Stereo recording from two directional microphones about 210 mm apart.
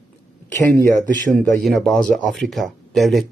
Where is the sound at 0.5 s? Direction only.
10° left (ahead or behind).